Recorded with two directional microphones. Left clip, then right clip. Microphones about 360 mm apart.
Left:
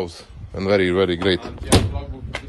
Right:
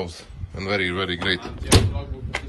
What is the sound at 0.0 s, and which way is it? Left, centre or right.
Speech, centre.